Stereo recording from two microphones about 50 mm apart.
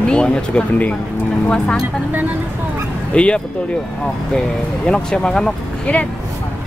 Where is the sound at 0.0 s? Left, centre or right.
Centre.